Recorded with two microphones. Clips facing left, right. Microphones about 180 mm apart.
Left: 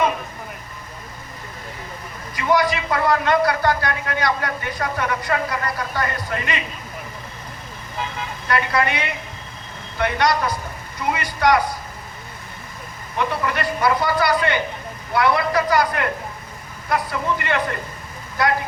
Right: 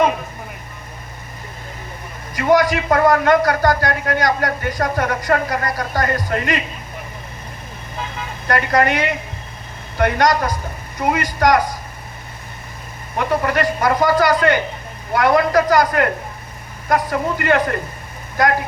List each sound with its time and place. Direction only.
2.3 s a man's voice: 45° right (ahead or behind)
8.4 s a man's voice: 45° right (ahead or behind)
13.1 s a man's voice: 45° right (ahead or behind)